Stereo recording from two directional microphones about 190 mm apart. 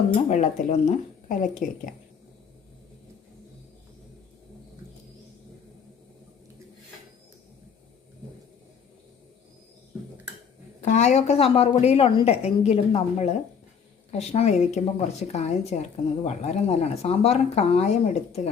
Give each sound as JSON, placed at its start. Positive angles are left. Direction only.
{"t": 0.3, "sound": "a woman's voice", "side_deg": 40}
{"t": 10.8, "sound": "a woman's voice", "side_deg": 40}